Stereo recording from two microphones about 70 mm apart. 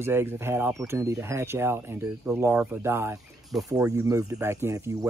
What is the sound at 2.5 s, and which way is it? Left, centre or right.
Speech, right.